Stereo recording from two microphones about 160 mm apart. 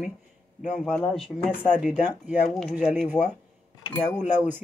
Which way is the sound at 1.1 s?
Centre (ahead or behind).